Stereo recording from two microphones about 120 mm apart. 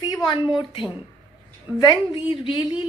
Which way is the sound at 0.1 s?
35° left (ahead or behind).